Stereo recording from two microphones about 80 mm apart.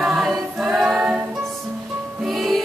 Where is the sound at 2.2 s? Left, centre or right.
Centre.